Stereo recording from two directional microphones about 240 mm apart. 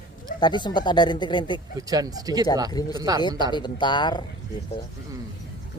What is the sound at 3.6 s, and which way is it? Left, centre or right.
Speech, centre.